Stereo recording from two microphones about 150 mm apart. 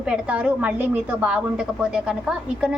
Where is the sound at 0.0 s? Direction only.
5° right (ahead or behind).